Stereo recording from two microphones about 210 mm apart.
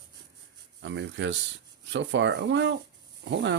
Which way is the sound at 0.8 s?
60° right (ahead or behind).